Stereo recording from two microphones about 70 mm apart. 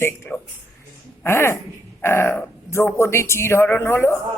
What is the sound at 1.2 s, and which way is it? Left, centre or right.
Speech, left.